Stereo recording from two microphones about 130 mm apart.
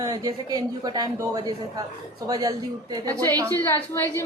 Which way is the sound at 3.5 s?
20° left (ahead or behind).